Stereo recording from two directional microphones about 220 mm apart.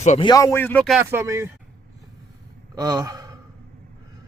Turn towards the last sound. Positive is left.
turn(degrees=-15)  # may be behind; listen again after turning